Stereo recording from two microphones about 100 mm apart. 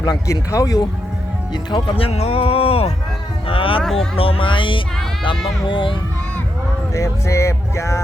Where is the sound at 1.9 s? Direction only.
80° left.